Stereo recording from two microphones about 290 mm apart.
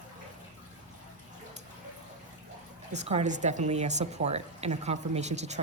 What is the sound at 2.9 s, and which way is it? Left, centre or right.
A woman's voice, right.